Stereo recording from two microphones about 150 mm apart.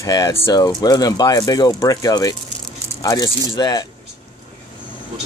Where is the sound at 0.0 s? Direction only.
20° left (ahead or behind).